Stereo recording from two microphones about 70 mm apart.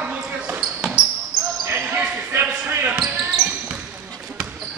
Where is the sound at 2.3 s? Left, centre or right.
Right.